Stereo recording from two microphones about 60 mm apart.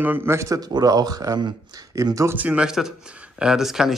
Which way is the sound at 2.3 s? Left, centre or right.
Right.